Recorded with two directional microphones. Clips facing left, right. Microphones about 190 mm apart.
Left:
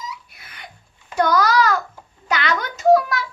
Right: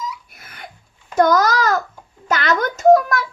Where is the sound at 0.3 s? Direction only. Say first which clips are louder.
Right 3 dB; 45° right (ahead or behind).